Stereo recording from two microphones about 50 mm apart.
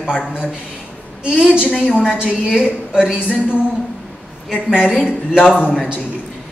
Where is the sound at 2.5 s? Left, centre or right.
Right.